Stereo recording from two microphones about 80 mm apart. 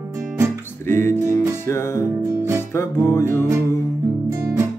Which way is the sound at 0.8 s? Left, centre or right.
Left.